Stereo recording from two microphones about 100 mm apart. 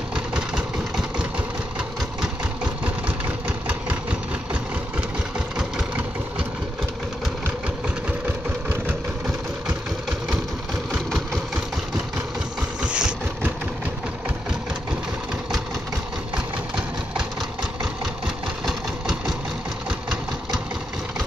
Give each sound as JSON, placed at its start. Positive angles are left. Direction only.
{"t": 0.1, "sound": "engine", "side_deg": -5}
{"t": 3.4, "sound": "engine", "side_deg": -15}
{"t": 5.6, "sound": "engine", "side_deg": -10}
{"t": 8.3, "sound": "vehicle", "side_deg": -20}
{"t": 11.1, "sound": "engine", "side_deg": 0}
{"t": 12.8, "sound": "vehicle", "side_deg": -10}
{"t": 18.7, "sound": "engine", "side_deg": -5}